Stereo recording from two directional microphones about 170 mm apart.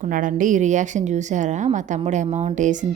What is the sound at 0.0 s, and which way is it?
A woman's voice, 50° right (ahead or behind).